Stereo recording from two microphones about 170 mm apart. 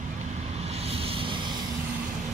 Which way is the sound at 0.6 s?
35° right (ahead or behind).